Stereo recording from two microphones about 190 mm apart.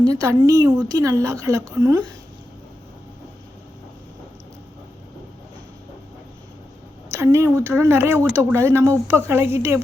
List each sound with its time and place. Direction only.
0.0 s speech: 15° right (ahead or behind)
7.1 s speech: 15° right (ahead or behind)